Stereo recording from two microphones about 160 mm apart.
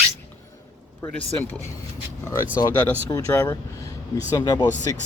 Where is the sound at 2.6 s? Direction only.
25° left (ahead or behind).